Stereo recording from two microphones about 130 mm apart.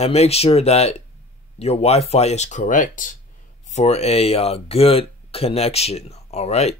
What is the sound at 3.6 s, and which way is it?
Speech, 60° left (ahead or behind).